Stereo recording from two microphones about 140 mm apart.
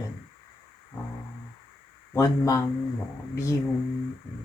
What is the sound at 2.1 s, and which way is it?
Speech, 20° left (ahead or behind).